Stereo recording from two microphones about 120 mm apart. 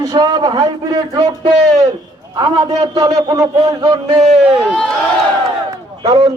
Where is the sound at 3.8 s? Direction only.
45° right (ahead or behind).